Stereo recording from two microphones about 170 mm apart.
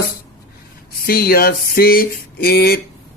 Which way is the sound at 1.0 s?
65° left (ahead or behind).